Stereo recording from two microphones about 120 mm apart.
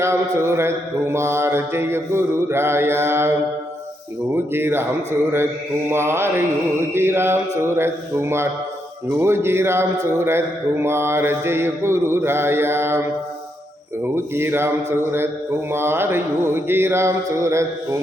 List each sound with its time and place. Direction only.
0.0 s a man's voice: 20° right (ahead or behind)
4.5 s a man's voice: 20° right (ahead or behind)
5.9 s a man's voice: 20° right (ahead or behind)
14.0 s a man's voice: 20° right (ahead or behind)